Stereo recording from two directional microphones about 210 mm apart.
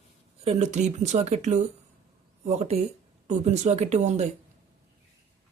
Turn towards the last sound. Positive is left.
turn(degrees=-35)  # may be behind; listen again after turning